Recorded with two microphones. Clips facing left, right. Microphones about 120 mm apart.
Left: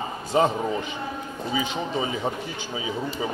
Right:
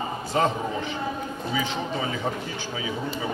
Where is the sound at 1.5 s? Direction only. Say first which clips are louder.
Left 2 dB; 20° left (ahead or behind).